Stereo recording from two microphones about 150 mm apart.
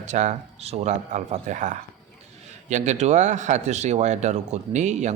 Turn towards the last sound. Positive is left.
turn(degrees=-50)  # may be behind; listen again after turning